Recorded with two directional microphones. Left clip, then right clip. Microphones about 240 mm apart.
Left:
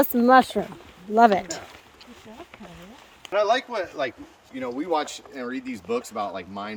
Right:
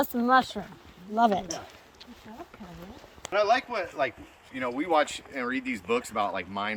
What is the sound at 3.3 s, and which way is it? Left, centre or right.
Speech, centre.